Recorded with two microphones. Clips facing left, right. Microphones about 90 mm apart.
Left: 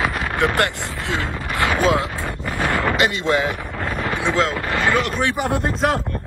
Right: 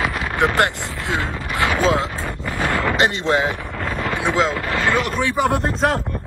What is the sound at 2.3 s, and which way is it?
Vehicle, 15° left (ahead or behind).